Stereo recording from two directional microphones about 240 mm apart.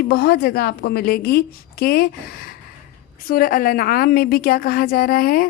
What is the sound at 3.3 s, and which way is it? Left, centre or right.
A woman's voice, left.